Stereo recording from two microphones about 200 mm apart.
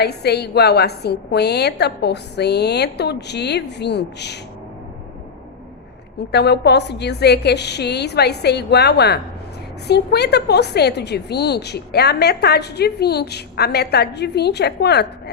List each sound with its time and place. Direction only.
0.0 s a woman's voice: 55° left (ahead or behind)
6.3 s a woman's voice: 55° left (ahead or behind)